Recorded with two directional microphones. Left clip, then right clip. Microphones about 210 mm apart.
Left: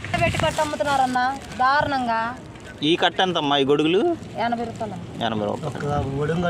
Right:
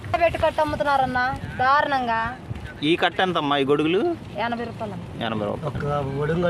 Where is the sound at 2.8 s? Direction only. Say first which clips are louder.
Left 1 dB; 10° left (ahead or behind).